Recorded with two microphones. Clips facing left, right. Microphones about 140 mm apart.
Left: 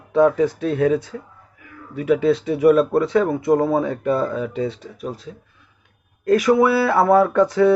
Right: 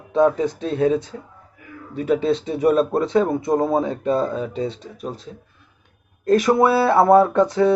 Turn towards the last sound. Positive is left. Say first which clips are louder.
# left 1 dB
turn(degrees=-20)  # may be behind; listen again after turning